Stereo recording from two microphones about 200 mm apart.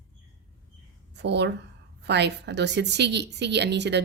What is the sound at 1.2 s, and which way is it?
Speech, 60° right (ahead or behind).